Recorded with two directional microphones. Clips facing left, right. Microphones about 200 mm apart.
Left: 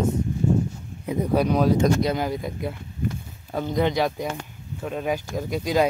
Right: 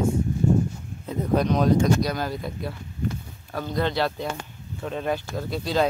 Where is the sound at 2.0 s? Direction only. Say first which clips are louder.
Left 3 dB; 20° left (ahead or behind).